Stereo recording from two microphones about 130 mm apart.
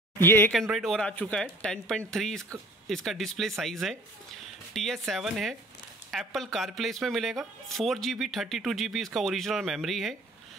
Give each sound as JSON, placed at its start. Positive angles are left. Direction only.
{"t": 0.2, "sound": "speech", "side_deg": 15}
{"t": 0.5, "sound": "speech", "side_deg": 0}